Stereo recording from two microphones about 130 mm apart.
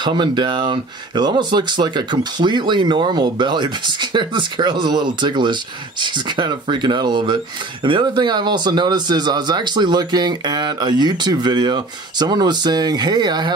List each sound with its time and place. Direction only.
0.0 s speech: 35° right (ahead or behind)